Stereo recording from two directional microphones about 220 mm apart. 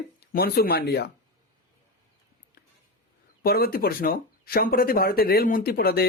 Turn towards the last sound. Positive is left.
turn(degrees=45)  # may be behind; listen again after turning